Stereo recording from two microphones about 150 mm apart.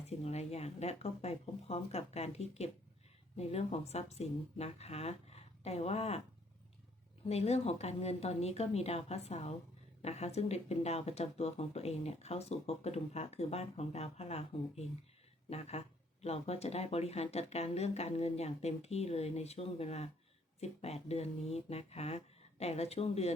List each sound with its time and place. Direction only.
0.0 s speech: 45° left (ahead or behind)
7.3 s speech: 45° left (ahead or behind)
15.4 s speech: 45° left (ahead or behind)